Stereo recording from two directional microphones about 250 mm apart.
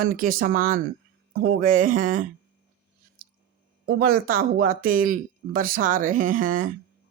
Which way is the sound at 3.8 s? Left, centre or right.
Right.